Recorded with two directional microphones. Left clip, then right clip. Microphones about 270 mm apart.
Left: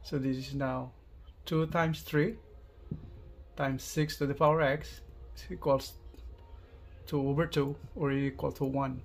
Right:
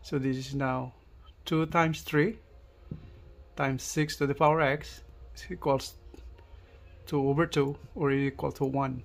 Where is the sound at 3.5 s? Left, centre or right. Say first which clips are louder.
Right 3 dB; right.